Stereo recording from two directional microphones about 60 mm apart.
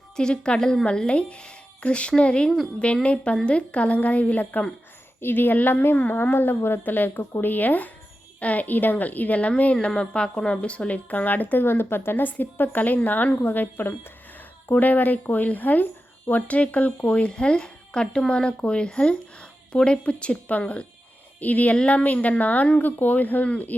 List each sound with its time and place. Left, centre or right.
0.2 s speech: centre
5.2 s a woman's voice: left
11.6 s speech: left